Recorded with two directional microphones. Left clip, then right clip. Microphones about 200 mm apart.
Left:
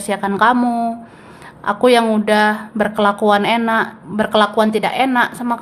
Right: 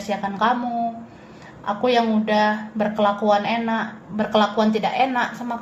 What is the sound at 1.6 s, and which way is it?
Speech, 30° left (ahead or behind).